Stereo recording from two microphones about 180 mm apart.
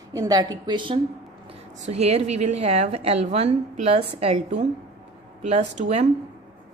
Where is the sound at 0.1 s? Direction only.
20° right (ahead or behind).